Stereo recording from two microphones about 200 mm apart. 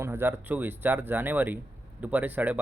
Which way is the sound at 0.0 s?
10° right (ahead or behind).